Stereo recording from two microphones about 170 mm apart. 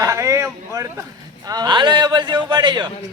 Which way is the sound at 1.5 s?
25° right (ahead or behind).